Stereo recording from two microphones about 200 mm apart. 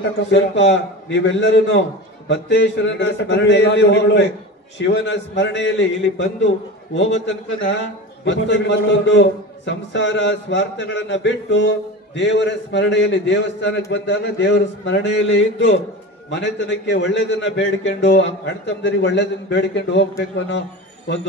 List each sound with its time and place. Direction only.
0.3 s a man's voice: 65° left (ahead or behind)
16.3 s a man's voice: 60° left (ahead or behind)